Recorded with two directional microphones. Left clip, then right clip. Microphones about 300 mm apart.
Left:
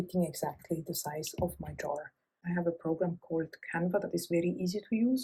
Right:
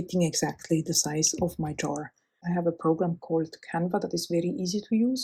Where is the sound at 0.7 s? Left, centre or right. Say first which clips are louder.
Right 9 dB; right.